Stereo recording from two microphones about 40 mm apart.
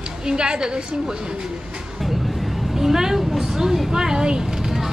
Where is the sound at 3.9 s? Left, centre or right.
Centre.